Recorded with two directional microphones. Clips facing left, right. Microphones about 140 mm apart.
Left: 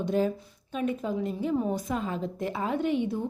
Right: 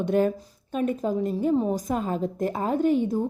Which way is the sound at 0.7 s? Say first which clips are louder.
Right 4 dB; 45° right (ahead or behind).